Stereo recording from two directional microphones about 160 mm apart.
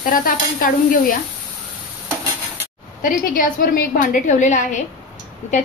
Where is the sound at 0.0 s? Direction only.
60° left (ahead or behind).